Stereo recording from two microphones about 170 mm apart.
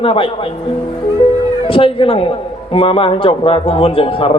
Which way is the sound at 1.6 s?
30° left (ahead or behind).